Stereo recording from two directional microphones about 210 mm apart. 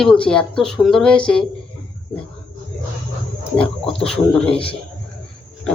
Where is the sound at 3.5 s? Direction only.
5° left (ahead or behind).